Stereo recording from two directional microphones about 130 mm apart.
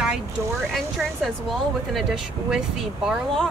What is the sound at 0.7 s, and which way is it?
Speech, centre (ahead or behind).